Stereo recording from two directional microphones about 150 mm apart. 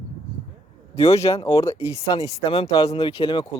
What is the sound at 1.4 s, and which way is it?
Speech, 20° left (ahead or behind).